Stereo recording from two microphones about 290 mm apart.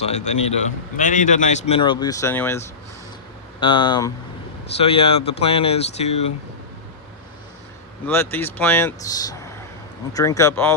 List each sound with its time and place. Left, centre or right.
0.0 s speech: left
8.0 s speech: centre